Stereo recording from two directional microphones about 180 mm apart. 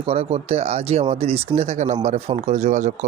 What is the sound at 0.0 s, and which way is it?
Speech, 30° right (ahead or behind).